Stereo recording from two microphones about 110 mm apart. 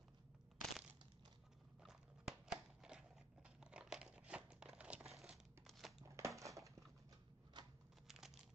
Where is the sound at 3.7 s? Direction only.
5° right (ahead or behind).